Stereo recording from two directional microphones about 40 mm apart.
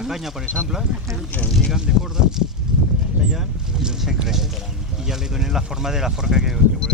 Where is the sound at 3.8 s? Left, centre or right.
Centre.